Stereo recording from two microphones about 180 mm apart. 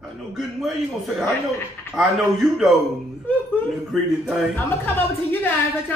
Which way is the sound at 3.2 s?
5° left (ahead or behind).